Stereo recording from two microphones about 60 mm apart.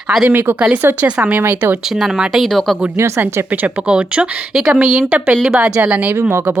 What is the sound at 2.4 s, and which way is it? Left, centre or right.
Speech, centre.